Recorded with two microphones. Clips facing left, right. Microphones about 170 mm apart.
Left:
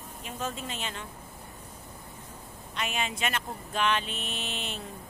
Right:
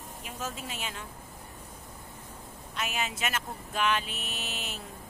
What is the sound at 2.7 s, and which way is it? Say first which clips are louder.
A woman's voice: left 1 dB; 5° right (ahead or behind).